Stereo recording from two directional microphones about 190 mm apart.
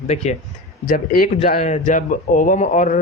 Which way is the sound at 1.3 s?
35° left (ahead or behind).